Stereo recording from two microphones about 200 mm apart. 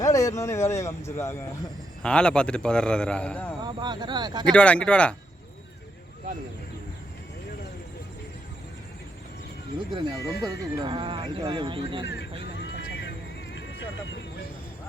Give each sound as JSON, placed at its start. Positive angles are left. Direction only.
{"t": 0.0, "sound": "a man's voice", "side_deg": 15}
{"t": 3.6, "sound": "speech", "side_deg": -20}
{"t": 4.5, "sound": "a man's voice", "side_deg": 5}
{"t": 9.9, "sound": "speech", "side_deg": -25}
{"t": 12.0, "sound": "speech", "side_deg": 60}
{"t": 12.4, "sound": "vehicle", "side_deg": 60}